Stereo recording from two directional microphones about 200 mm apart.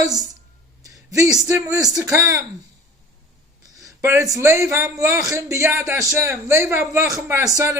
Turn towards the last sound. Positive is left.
turn(degrees=-15)  # may be behind; listen again after turning